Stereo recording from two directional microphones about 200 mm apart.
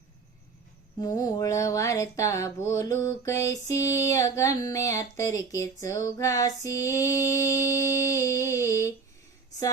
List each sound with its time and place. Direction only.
0.9 s speech: 20° left (ahead or behind)